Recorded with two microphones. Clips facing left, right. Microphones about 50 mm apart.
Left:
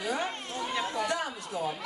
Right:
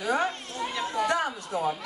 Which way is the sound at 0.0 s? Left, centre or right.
Right.